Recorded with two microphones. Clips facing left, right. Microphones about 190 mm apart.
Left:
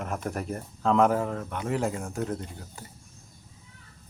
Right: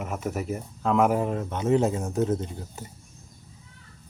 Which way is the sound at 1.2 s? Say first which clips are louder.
Right 3 dB; 20° right (ahead or behind).